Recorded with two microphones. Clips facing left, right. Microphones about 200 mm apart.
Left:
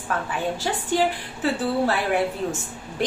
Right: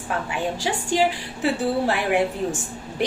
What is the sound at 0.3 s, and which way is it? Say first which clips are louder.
A woman's voice: right 1 dB; 15° right (ahead or behind).